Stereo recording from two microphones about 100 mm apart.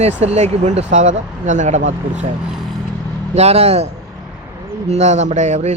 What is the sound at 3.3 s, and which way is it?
Speech, 90° right.